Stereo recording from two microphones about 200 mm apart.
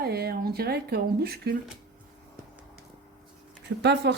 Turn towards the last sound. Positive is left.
turn(degrees=-55)  # may be behind; listen again after turning